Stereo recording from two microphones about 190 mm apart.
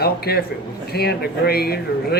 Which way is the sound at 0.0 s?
55° left (ahead or behind).